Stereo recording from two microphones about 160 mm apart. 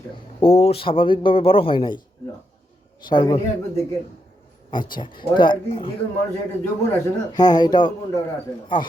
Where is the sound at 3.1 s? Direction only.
25° left (ahead or behind).